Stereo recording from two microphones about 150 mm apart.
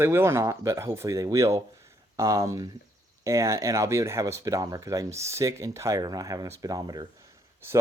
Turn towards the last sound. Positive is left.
turn(degrees=-20)  # may be behind; listen again after turning